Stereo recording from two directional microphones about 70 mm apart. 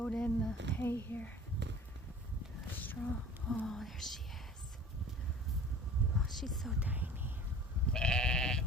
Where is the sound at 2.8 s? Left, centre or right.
Left.